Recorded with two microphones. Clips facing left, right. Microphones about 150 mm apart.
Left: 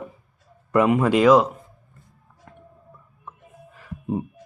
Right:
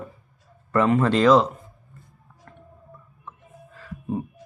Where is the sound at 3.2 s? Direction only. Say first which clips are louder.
Left 1 dB; 15° left (ahead or behind).